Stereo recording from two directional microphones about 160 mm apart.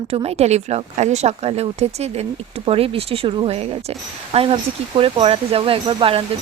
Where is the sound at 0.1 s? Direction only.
40° right (ahead or behind).